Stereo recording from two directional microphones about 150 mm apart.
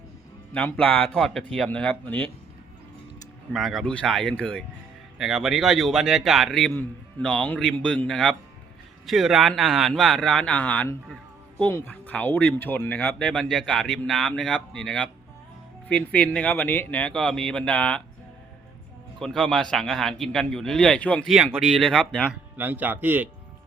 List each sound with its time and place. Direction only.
0.5 s speech: 10° left (ahead or behind)
3.5 s speech: centre (ahead or behind)
19.2 s speech: 5° left (ahead or behind); by 23.3 s 10° right (ahead or behind)